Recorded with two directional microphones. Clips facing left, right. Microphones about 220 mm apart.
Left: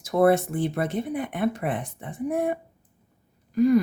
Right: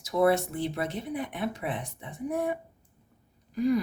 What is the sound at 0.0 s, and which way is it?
A woman's voice, 50° left (ahead or behind).